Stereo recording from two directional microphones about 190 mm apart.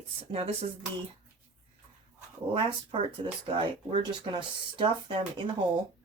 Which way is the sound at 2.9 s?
25° right (ahead or behind).